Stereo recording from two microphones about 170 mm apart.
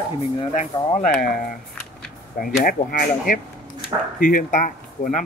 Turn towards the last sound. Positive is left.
turn(degrees=50)  # may be behind; listen again after turning